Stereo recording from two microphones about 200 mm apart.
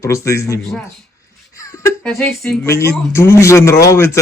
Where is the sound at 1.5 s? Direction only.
15° left (ahead or behind).